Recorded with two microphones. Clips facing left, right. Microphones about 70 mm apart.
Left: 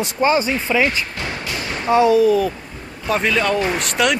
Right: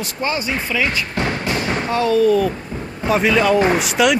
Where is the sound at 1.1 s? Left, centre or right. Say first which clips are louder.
Right 5 dB; right.